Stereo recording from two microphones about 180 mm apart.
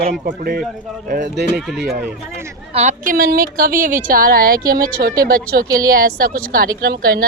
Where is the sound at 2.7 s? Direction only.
40° right (ahead or behind); by 5.1 s 65° right (ahead or behind).